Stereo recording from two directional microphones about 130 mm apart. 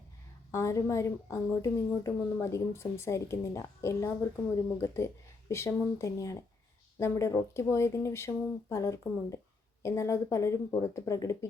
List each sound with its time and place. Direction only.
0.5 s speech: 20° left (ahead or behind)